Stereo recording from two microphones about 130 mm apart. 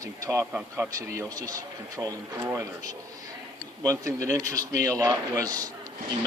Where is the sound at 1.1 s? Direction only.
25° right (ahead or behind).